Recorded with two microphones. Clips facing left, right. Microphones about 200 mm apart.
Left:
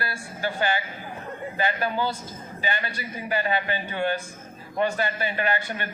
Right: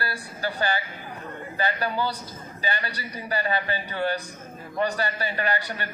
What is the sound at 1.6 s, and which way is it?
Speech, 20° left (ahead or behind).